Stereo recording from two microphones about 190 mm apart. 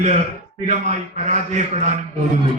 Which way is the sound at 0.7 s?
35° right (ahead or behind).